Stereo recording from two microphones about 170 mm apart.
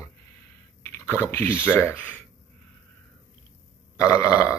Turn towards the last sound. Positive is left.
turn(degrees=20)  # may be behind; listen again after turning